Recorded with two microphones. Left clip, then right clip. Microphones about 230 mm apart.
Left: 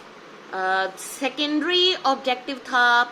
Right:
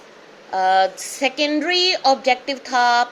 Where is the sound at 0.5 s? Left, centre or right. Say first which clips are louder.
Right 7 dB; right.